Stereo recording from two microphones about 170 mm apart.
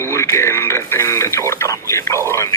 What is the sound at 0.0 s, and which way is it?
Radio, 15° left (ahead or behind).